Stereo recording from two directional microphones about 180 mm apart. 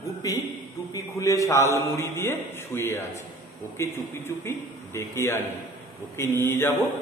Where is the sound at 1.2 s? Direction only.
15° left (ahead or behind).